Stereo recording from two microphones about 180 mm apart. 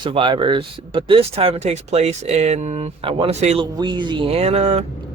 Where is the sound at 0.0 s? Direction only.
25° right (ahead or behind).